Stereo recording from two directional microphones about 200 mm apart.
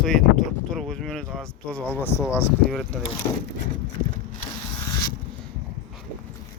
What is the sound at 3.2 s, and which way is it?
Speech, 20° left (ahead or behind).